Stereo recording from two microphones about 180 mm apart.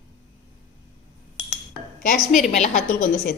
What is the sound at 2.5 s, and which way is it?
Speech, 40° left (ahead or behind).